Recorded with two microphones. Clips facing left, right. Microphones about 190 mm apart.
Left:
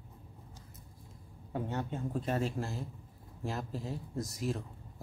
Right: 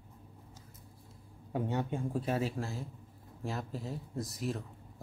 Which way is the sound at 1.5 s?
15° right (ahead or behind).